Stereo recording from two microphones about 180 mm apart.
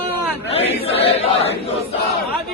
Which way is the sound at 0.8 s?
35° left (ahead or behind).